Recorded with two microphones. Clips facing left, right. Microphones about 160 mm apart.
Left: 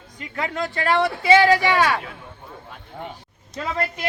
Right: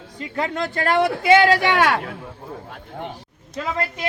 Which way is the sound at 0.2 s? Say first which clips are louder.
Right 2 dB; 35° right (ahead or behind).